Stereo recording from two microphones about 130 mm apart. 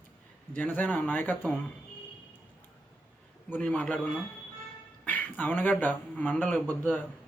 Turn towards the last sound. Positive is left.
turn(degrees=15)  # may be behind; listen again after turning